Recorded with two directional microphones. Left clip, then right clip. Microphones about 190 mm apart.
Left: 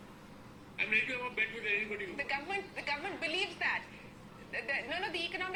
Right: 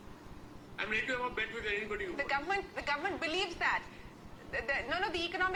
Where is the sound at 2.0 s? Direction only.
Centre (ahead or behind).